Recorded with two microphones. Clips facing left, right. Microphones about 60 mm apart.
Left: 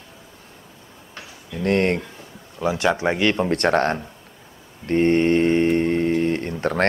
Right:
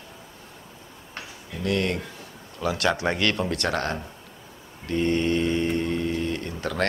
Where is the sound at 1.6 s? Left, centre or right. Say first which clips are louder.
Left 6 dB; left.